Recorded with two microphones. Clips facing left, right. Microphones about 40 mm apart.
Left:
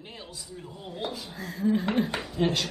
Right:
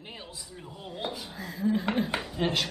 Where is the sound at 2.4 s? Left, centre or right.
Centre.